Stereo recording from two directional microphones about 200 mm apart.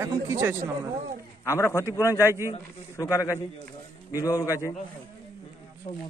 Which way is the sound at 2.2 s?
15° right (ahead or behind).